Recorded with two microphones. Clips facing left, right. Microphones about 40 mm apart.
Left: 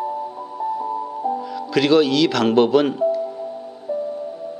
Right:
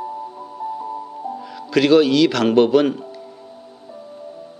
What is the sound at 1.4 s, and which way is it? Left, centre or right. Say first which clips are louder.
Speech: right 5 dB; centre.